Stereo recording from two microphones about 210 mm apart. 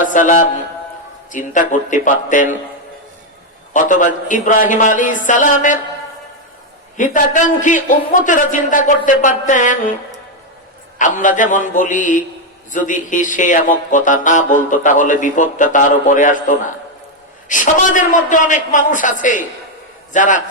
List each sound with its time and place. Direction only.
0.0 s a sound: 40° left (ahead or behind)
1.3 s speech: 35° left (ahead or behind)
3.7 s speech: 35° left (ahead or behind)
6.9 s speech: 35° left (ahead or behind)
10.9 s speech: 35° left (ahead or behind)